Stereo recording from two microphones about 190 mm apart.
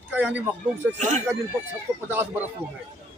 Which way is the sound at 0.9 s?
40° right (ahead or behind).